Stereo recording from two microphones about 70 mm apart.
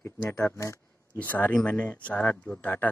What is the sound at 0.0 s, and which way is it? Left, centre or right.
Speech, left.